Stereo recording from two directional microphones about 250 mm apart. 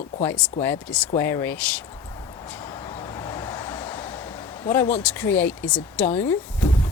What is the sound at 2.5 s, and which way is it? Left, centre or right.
Vehicle, centre.